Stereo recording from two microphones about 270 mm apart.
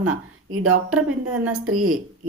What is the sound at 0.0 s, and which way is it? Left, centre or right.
A woman's voice, right.